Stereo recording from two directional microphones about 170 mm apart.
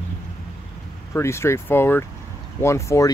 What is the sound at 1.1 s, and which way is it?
Speech, 15° left (ahead or behind).